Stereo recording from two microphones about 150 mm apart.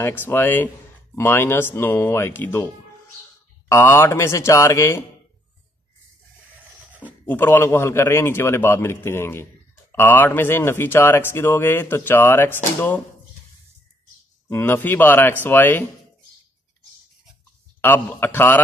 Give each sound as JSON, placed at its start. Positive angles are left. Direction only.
{"t": 0.0, "sound": "speech", "side_deg": 15}
{"t": 6.9, "sound": "a sound", "side_deg": -10}
{"t": 7.2, "sound": "speech", "side_deg": 15}
{"t": 14.5, "sound": "speech", "side_deg": 15}
{"t": 17.8, "sound": "speech", "side_deg": 15}